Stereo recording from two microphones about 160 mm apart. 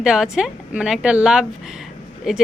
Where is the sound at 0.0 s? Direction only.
5° right (ahead or behind).